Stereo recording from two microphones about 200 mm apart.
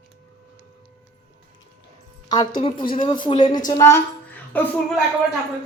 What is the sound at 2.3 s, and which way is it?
A woman's voice, 25° left (ahead or behind).